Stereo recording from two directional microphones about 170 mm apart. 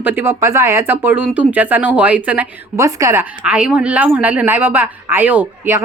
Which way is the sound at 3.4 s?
5° right (ahead or behind).